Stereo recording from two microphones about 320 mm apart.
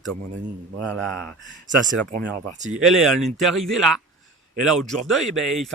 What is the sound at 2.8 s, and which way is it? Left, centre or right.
A man's voice, centre.